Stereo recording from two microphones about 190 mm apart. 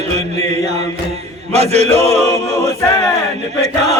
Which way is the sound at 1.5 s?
35° right (ahead or behind).